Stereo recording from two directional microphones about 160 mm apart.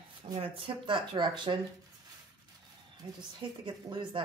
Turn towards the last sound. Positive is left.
turn(degrees=-30)  # may be behind; listen again after turning